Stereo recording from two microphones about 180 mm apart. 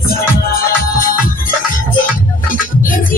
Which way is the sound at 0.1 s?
55° left (ahead or behind).